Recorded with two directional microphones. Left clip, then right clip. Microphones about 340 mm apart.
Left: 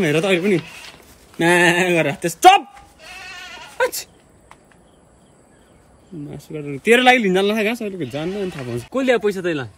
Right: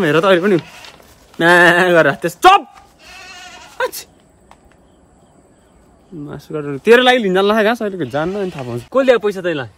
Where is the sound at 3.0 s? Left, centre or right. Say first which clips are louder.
Left 1 dB; centre.